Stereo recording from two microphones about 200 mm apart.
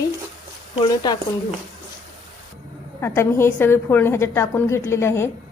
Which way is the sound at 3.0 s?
10° left (ahead or behind).